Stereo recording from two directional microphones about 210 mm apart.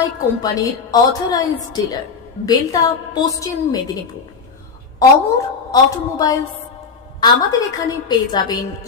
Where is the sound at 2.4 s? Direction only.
20° left (ahead or behind).